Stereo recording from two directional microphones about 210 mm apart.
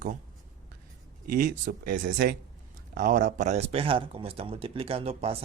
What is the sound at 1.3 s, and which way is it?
Speech, 40° right (ahead or behind).